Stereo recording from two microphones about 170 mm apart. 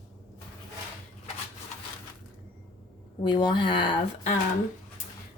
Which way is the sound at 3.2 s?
25° left (ahead or behind).